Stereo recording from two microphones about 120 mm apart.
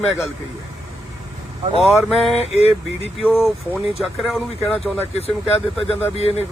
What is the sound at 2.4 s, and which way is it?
Speech, 60° left (ahead or behind).